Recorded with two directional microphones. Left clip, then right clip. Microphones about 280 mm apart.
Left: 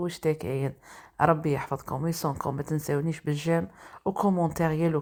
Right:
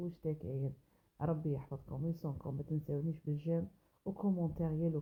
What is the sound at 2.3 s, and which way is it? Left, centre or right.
Speech, left.